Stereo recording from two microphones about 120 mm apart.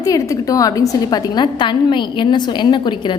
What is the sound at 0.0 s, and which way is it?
A woman's voice, 30° left (ahead or behind).